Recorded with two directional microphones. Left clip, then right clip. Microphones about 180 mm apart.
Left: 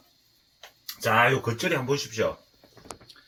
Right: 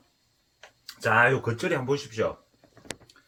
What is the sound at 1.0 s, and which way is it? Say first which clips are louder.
Speech: even; 5° right (ahead or behind).